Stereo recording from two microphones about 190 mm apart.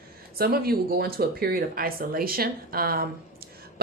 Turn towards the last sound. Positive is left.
turn(degrees=-50)  # may be behind; listen again after turning